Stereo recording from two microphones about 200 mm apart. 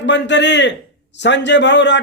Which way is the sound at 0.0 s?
60° left (ahead or behind).